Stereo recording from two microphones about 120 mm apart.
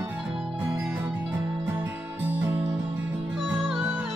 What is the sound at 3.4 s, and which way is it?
Music, 5° left (ahead or behind).